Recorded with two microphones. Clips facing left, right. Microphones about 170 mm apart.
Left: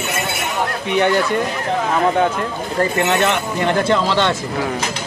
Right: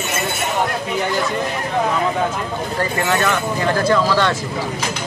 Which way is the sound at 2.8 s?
25° left (ahead or behind).